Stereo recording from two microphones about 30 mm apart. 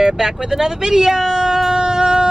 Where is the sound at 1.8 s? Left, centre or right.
Right.